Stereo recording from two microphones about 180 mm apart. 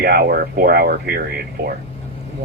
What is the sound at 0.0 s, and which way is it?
Speech, 60° right (ahead or behind).